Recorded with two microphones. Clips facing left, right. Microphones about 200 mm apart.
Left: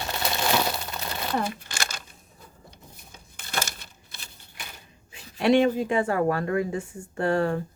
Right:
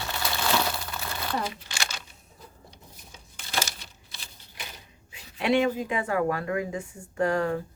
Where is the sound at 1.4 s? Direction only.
50° left (ahead or behind).